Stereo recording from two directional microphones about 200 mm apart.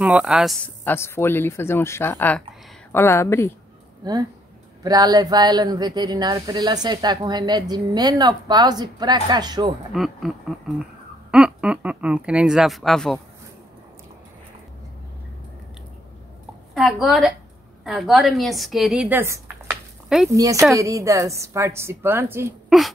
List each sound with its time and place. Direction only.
0.0 s speech: 5° right (ahead or behind)
0.8 s speech: 10° left (ahead or behind)
4.0 s speech: 20° right (ahead or behind)
9.9 s speech: centre (ahead or behind)
11.3 s speech: 5° right (ahead or behind)
16.7 s a woman's voice: centre (ahead or behind)
22.7 s speech: centre (ahead or behind)